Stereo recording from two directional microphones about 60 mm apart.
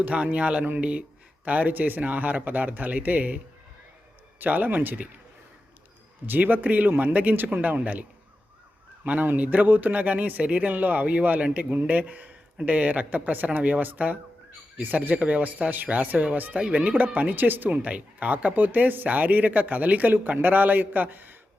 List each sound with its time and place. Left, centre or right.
0.0 s speech: right
6.2 s speech: right
9.0 s speech: right